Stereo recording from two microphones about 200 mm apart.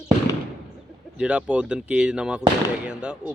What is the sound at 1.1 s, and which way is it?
Speech, 5° right (ahead or behind).